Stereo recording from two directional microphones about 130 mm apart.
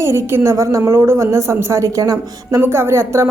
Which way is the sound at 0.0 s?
20° right (ahead or behind).